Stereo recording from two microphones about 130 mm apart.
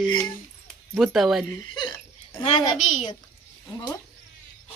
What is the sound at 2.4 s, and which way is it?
Speech, 60° left (ahead or behind).